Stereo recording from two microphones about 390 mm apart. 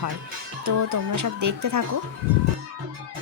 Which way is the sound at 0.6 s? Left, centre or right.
Right.